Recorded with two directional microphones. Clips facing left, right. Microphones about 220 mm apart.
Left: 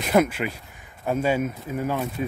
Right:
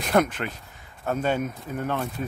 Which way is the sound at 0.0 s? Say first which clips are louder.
Left 2 dB; 5° left (ahead or behind).